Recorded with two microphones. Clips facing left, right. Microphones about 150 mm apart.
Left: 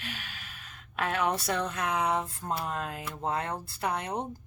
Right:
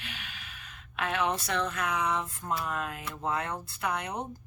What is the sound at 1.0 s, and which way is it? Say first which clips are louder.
Speech: left 1 dB; 40° left (ahead or behind).